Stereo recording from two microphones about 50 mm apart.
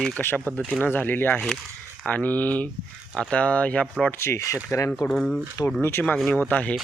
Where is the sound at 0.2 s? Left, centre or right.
Left.